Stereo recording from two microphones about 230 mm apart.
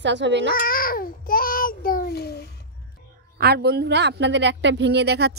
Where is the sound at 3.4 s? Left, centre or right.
Right.